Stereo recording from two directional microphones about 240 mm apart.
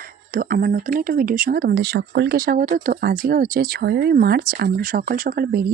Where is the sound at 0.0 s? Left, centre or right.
Right.